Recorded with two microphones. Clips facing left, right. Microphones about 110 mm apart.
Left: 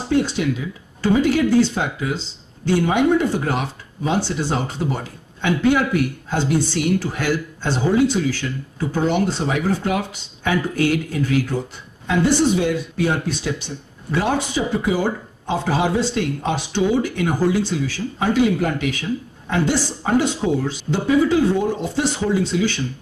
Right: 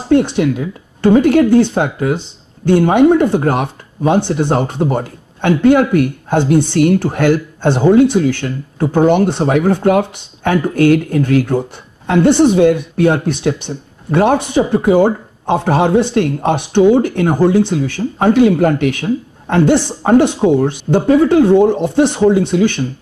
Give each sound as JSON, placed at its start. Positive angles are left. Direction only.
{"t": 0.1, "sound": "speech", "side_deg": -55}